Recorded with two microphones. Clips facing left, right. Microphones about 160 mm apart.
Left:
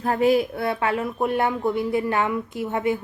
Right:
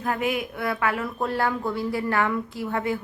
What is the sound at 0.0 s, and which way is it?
A woman's voice, 35° left (ahead or behind).